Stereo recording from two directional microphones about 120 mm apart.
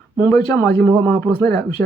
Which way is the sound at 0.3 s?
15° left (ahead or behind).